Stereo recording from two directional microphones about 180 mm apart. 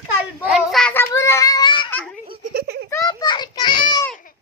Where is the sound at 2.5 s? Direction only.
60° right (ahead or behind).